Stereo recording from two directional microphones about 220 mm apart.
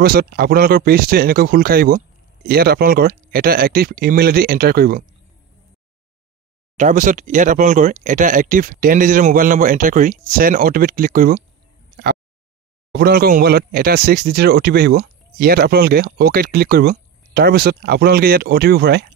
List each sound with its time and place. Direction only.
0.0 s speech: 45° right (ahead or behind)
6.8 s speech: 35° right (ahead or behind)
12.9 s speech: 45° right (ahead or behind)